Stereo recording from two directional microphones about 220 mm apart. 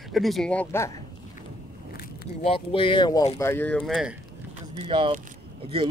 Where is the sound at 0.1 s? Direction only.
Centre (ahead or behind).